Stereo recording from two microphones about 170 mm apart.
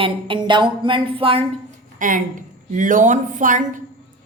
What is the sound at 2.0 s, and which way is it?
A woman's voice, 50° right (ahead or behind).